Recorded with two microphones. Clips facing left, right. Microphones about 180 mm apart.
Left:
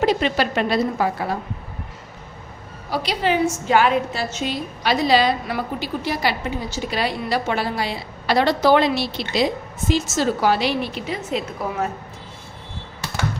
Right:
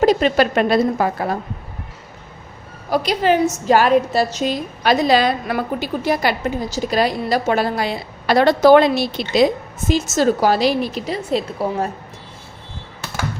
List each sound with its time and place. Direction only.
0.0 s a woman's voice: 45° right (ahead or behind)
2.9 s a woman's voice: 45° right (ahead or behind)